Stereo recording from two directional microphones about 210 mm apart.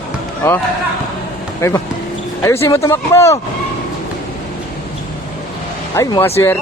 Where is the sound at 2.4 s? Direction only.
15° left (ahead or behind).